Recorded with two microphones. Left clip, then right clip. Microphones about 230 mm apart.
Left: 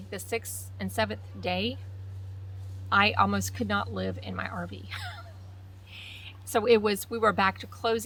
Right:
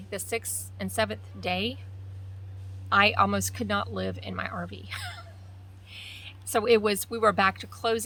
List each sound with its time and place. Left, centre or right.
0.1 s speech: centre
2.9 s a woman's voice: centre